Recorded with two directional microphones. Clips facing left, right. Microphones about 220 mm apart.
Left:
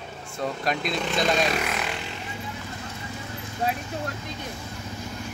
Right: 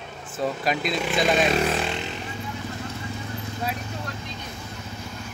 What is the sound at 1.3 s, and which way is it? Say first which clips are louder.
Speech: right 6 dB; 20° right (ahead or behind).